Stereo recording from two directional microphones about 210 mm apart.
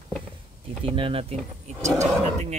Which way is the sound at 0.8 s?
25° right (ahead or behind).